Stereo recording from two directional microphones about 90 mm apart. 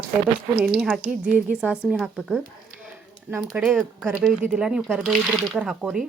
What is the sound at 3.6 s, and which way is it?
Speech, 5° right (ahead or behind).